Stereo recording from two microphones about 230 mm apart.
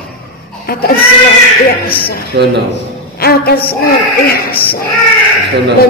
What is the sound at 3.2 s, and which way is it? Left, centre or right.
A woman's voice, left.